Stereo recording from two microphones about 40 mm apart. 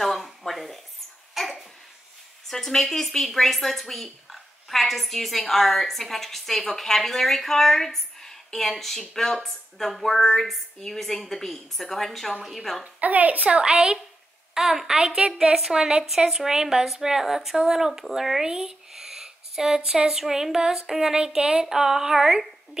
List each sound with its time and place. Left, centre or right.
0.0 s a sound: centre
1.3 s babbling: centre
2.5 s a woman's voice: centre
12.8 s a woman's voice: right
13.6 s a woman's voice: right
14.5 s a woman's voice: centre; by 21.6 s right
21.6 s speech: centre